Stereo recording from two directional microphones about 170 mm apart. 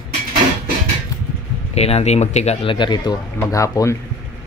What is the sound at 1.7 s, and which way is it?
Speech, 40° left (ahead or behind).